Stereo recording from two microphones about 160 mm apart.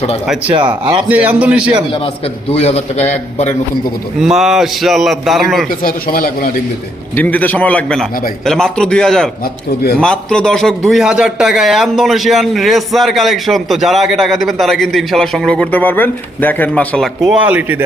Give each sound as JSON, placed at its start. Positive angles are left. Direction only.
{"t": 0.4, "sound": "speech", "side_deg": -30}
{"t": 1.0, "sound": "a man's voice", "side_deg": -10}
{"t": 2.5, "sound": "a man's voice", "side_deg": 40}
{"t": 4.2, "sound": "a man's voice", "side_deg": -5}
{"t": 5.8, "sound": "speech", "side_deg": 65}
{"t": 7.2, "sound": "a man's voice", "side_deg": 10}
{"t": 17.2, "sound": "a man's voice", "side_deg": -5}